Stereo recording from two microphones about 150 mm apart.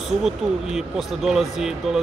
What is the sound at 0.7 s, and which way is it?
Speech, centre (ahead or behind).